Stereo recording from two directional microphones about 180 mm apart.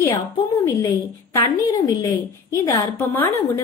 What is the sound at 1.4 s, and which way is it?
A woman's voice, 25° left (ahead or behind).